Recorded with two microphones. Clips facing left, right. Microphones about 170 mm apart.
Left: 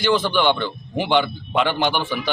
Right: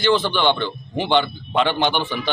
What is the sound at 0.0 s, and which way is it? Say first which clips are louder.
A man's voice: even; 5° left (ahead or behind).